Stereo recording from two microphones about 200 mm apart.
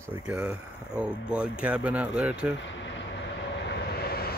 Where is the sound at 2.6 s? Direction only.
65° left (ahead or behind).